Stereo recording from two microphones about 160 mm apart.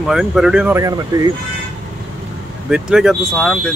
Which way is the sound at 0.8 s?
25° right (ahead or behind).